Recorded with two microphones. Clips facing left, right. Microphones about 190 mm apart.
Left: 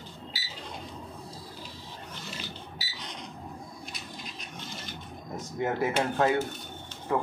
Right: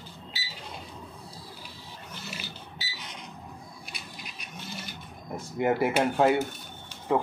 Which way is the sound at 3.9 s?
10° right (ahead or behind).